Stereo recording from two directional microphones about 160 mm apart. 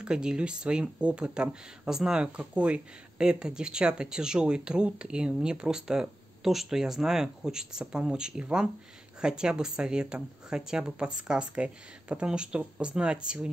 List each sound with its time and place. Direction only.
0.0 s speech: 5° right (ahead or behind)